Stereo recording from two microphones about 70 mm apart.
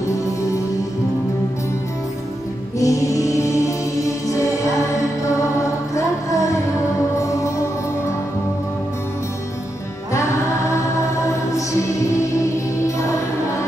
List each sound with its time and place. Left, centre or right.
2.8 s music: left
5.9 s music: left